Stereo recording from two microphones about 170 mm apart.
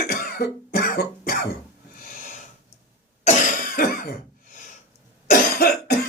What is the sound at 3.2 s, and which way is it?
Cough, 45° left (ahead or behind).